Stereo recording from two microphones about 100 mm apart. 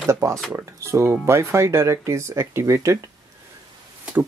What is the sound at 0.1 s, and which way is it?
Speech, 30° right (ahead or behind).